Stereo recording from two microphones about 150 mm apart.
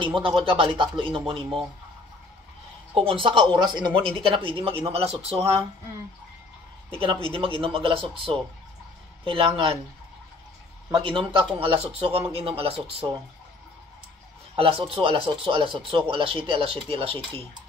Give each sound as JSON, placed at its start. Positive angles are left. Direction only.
{"t": 0.0, "sound": "speech", "side_deg": -35}
{"t": 2.9, "sound": "speech", "side_deg": -35}
{"t": 7.0, "sound": "speech", "side_deg": -35}
{"t": 10.9, "sound": "speech", "side_deg": -35}
{"t": 14.5, "sound": "speech", "side_deg": -35}